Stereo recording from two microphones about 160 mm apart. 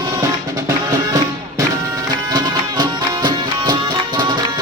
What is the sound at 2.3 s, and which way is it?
Music, 25° right (ahead or behind).